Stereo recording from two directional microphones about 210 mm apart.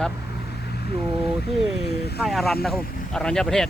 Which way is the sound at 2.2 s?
Centre (ahead or behind).